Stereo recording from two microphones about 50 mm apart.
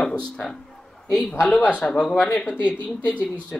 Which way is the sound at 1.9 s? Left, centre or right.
Centre.